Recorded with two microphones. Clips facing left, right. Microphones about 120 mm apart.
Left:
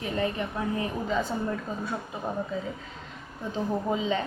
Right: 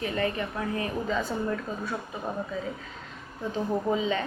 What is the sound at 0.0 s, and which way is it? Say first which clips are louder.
A woman's voice: even; 20° left (ahead or behind).